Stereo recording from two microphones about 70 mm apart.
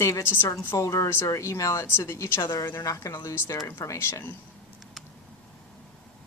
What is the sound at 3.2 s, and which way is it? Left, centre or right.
Speech, left.